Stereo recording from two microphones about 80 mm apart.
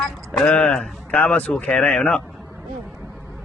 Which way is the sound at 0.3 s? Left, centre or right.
Centre.